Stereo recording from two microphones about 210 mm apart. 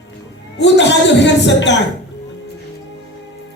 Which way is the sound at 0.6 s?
55° left (ahead or behind).